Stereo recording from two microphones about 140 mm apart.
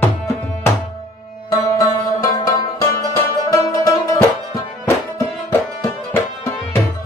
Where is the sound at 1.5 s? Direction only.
25° left (ahead or behind).